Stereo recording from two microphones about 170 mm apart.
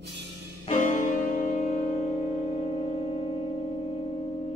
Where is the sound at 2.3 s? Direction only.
35° left (ahead or behind).